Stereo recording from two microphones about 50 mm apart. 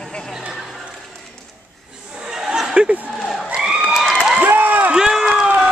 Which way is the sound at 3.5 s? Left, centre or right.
Centre.